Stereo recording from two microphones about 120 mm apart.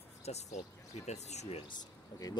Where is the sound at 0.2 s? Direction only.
65° left (ahead or behind).